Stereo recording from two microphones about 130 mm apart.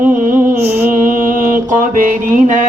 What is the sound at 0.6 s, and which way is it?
Music, 50° right (ahead or behind).